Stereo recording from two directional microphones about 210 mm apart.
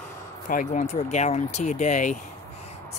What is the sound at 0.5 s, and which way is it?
Speech, 40° left (ahead or behind).